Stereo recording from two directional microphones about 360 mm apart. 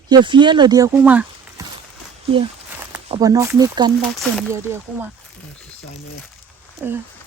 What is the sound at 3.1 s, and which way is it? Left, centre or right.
Speech, centre.